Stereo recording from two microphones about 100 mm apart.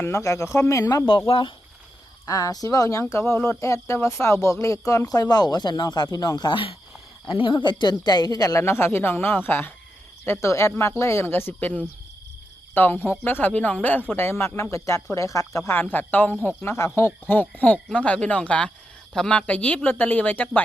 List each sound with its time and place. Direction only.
0.0 s speech: 30° left (ahead or behind)
1.0 s speech: 60° left (ahead or behind)
2.2 s speech: 35° left (ahead or behind)
7.3 s speech: 55° left (ahead or behind); by 8.6 s 40° left (ahead or behind)
8.6 s speech: 25° left (ahead or behind)